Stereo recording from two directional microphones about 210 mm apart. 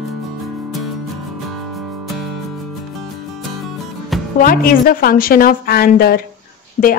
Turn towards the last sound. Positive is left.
turn(degrees=35)  # may be behind; listen again after turning